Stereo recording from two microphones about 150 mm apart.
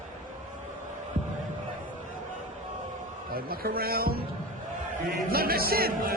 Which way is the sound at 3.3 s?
85° right.